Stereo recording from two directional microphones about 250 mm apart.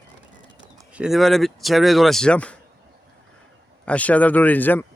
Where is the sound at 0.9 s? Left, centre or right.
Centre.